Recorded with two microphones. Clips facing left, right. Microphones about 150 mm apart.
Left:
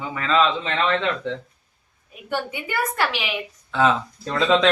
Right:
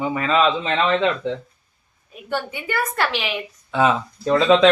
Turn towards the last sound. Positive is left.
turn(degrees=-5)  # may be behind; listen again after turning